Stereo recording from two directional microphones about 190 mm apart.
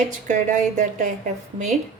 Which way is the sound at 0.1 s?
40° right (ahead or behind).